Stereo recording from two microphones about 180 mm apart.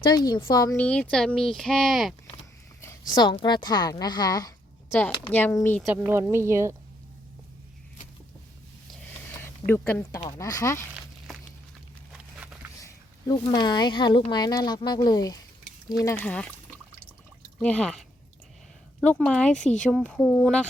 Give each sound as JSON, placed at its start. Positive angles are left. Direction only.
{"t": 0.1, "sound": "a woman's voice", "side_deg": 25}
{"t": 0.8, "sound": "speech", "side_deg": 10}
{"t": 3.1, "sound": "a woman's voice", "side_deg": 25}
{"t": 5.8, "sound": "speech", "side_deg": -10}
{"t": 9.4, "sound": "speech", "side_deg": 10}
{"t": 12.8, "sound": "a woman's voice", "side_deg": 20}
{"t": 16.2, "sound": "speech", "side_deg": 5}
{"t": 17.6, "sound": "speech", "side_deg": 5}